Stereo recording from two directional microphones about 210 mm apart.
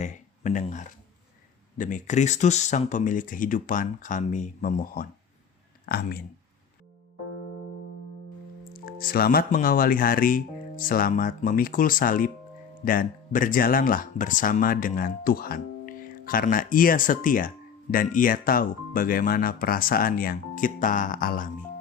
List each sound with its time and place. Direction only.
0.0 s speech: 35° left (ahead or behind)
8.7 s speech: 45° left (ahead or behind)